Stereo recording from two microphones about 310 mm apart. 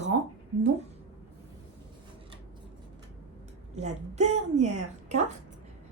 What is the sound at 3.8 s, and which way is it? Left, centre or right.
Speech, right.